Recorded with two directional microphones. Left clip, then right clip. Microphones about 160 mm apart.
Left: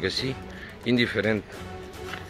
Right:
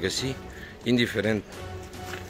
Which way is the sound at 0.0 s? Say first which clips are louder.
Left 1 dB; 20° right (ahead or behind).